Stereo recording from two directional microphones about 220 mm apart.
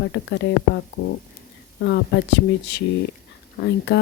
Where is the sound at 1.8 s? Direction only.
50° left (ahead or behind).